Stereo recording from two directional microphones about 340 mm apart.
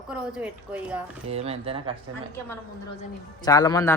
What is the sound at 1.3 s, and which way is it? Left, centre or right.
Speech, centre.